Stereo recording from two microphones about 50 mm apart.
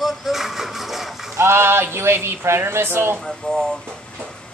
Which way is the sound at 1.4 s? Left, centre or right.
Right.